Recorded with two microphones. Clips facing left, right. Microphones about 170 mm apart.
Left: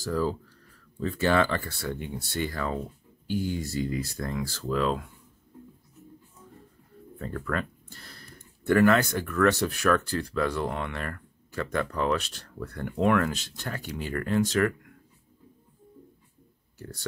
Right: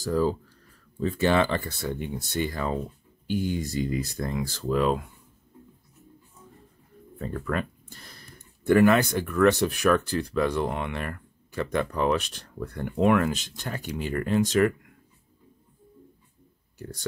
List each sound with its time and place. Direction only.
0.0 s speech: 20° right (ahead or behind)
7.2 s speech: 15° right (ahead or behind)
16.7 s speech: 15° right (ahead or behind)